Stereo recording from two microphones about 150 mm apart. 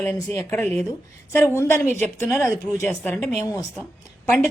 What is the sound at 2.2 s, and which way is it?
A woman's voice, 15° left (ahead or behind).